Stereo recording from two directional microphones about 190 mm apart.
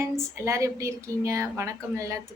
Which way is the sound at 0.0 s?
15° right (ahead or behind).